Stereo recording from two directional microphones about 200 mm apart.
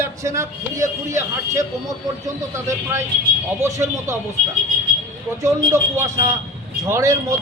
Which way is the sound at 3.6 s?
15° right (ahead or behind).